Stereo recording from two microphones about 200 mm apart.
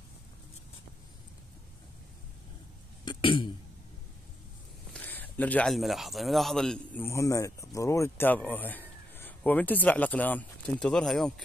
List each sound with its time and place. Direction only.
3.1 s cough: 25° left (ahead or behind)
4.9 s speech: 10° left (ahead or behind)